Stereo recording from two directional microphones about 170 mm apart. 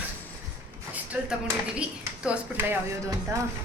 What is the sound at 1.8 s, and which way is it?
Speech, 5° right (ahead or behind).